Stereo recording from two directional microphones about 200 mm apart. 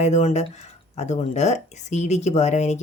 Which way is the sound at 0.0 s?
35° left (ahead or behind).